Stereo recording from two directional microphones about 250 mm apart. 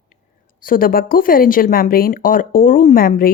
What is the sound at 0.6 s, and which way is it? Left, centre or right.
Speech, left.